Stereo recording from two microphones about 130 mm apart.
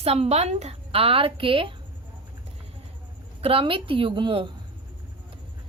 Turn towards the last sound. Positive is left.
turn(degrees=-40)  # may be behind; listen again after turning